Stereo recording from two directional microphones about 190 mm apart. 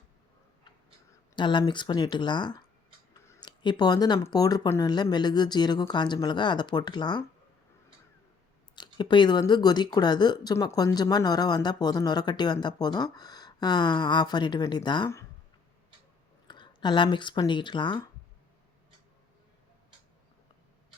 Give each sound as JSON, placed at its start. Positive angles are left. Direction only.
{"t": 1.4, "sound": "speech", "side_deg": 25}
{"t": 8.7, "sound": "speech", "side_deg": 25}
{"t": 16.5, "sound": "speech", "side_deg": 25}